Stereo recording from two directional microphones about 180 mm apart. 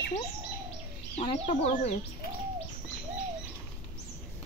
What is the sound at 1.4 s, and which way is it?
Speech, 40° left (ahead or behind).